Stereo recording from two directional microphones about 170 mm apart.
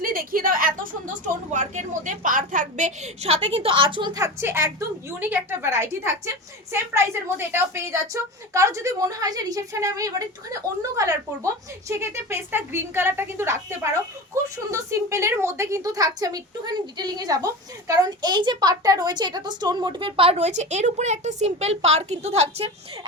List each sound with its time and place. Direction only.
0.0 s a woman's voice: 55° right (ahead or behind); by 22.7 s 35° right (ahead or behind)